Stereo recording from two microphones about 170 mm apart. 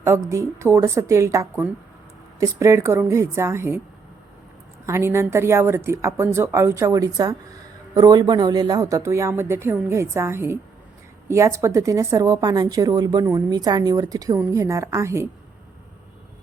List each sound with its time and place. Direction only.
0.0 s speech: 15° right (ahead or behind)
4.9 s a woman's voice: 15° right (ahead or behind)